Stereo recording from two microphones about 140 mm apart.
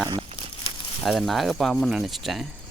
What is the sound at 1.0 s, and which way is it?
Speech, centre (ahead or behind).